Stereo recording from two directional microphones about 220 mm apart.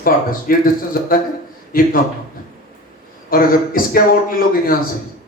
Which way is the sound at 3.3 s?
40° left (ahead or behind).